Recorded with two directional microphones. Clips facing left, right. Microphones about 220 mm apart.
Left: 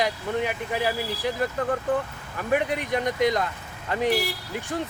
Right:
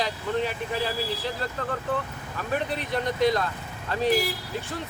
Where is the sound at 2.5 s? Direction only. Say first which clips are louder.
Left 4 dB; 15° left (ahead or behind).